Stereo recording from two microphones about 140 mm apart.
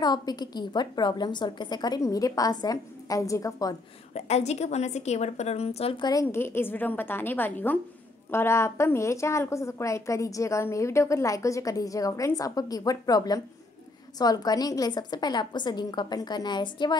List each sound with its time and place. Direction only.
0.0 s a woman's voice: 30° left (ahead or behind)
4.1 s a woman's voice: 50° left (ahead or behind)
6.2 s a woman's voice: 15° left (ahead or behind); by 16.9 s 30° left (ahead or behind)